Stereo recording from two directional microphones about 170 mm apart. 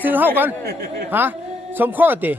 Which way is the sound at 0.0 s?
10° right (ahead or behind).